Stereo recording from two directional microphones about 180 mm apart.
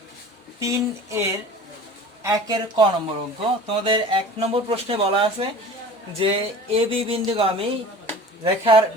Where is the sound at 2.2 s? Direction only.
20° right (ahead or behind).